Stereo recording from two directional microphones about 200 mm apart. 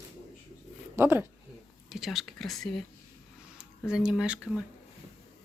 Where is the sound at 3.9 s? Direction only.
5° right (ahead or behind).